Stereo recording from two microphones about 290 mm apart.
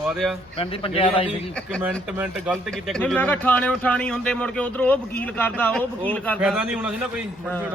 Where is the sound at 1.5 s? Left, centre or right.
Centre.